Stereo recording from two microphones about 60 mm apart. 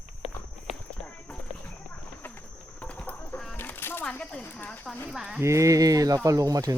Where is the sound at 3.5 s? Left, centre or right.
Left.